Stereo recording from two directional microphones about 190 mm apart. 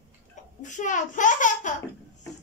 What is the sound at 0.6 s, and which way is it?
A child's voice, 40° left (ahead or behind).